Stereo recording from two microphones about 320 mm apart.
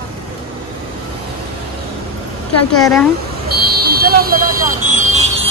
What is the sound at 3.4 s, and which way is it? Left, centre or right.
Vehicle, right.